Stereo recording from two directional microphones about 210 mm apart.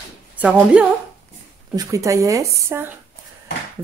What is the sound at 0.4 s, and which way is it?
Speech, 5° right (ahead or behind).